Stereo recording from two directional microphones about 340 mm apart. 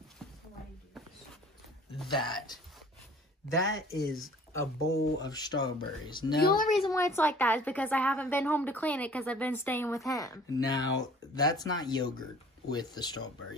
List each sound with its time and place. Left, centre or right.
0.2 s a sound: centre
2.0 s speech: centre
4.1 s speech: centre
6.3 s a woman's voice: left
6.8 s a woman's voice: centre